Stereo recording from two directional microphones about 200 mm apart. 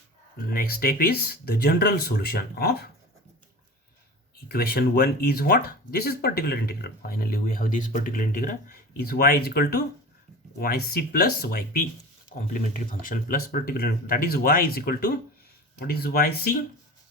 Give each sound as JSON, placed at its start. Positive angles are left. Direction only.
{"t": 0.5, "sound": "speech", "side_deg": 50}
{"t": 4.4, "sound": "speech", "side_deg": 50}